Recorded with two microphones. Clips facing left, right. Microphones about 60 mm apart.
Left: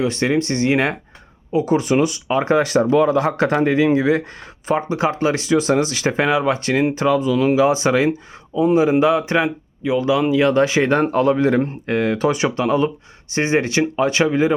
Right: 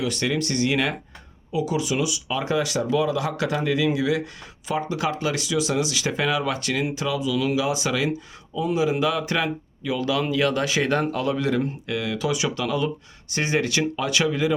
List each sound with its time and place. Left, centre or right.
0.0 s speech: left